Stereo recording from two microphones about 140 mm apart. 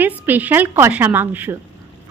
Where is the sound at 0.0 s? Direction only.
15° right (ahead or behind).